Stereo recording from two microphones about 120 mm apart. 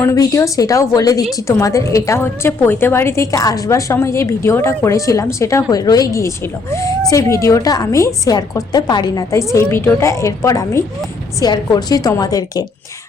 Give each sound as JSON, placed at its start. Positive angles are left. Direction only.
{"t": 0.0, "sound": "a woman's voice", "side_deg": 25}
{"t": 9.5, "sound": "a woman's voice", "side_deg": 20}